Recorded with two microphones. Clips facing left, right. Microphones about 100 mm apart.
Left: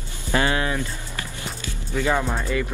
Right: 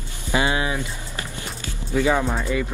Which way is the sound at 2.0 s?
15° right (ahead or behind).